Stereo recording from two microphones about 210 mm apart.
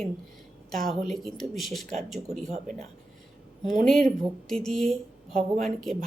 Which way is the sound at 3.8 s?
Centre (ahead or behind).